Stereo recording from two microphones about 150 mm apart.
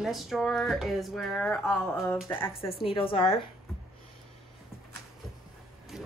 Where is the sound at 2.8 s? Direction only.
35° left (ahead or behind).